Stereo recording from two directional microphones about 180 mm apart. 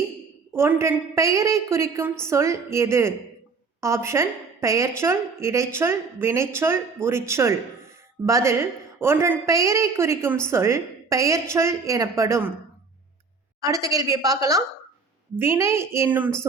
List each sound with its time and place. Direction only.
0.5 s a woman's voice: 15° right (ahead or behind)
13.6 s a woman's voice: 20° right (ahead or behind)